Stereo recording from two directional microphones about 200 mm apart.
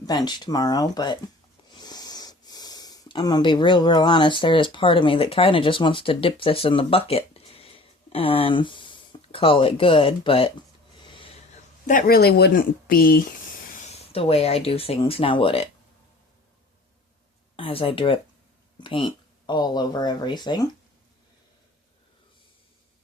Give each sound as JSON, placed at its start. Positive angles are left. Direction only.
{"t": 0.3, "sound": "speech", "side_deg": 20}
{"t": 11.0, "sound": "a sound", "side_deg": 25}
{"t": 11.9, "sound": "speech", "side_deg": 45}
{"t": 13.7, "sound": "speech", "side_deg": 35}
{"t": 17.6, "sound": "speech", "side_deg": 25}